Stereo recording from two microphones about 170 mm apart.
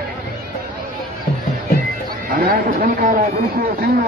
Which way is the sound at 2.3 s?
60° right (ahead or behind).